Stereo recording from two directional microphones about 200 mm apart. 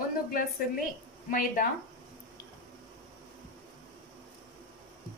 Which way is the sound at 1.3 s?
45° left (ahead or behind).